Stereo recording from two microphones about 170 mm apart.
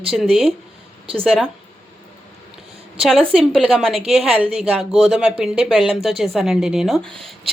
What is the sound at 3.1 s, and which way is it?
A woman's voice, centre (ahead or behind).